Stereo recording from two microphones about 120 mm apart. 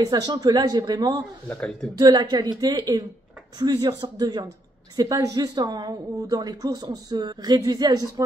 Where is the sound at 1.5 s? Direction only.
10° left (ahead or behind).